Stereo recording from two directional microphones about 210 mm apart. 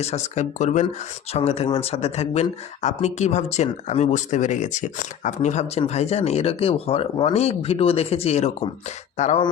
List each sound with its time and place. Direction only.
0.0 s speech: 30° left (ahead or behind)